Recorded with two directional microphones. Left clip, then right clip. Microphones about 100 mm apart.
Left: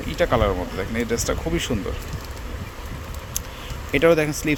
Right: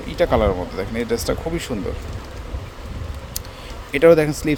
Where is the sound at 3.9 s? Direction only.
40° right (ahead or behind).